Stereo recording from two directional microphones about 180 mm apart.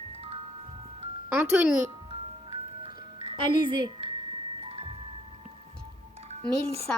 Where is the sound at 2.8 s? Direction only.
30° right (ahead or behind).